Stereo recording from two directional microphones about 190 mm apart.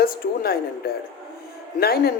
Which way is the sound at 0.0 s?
50° left (ahead or behind).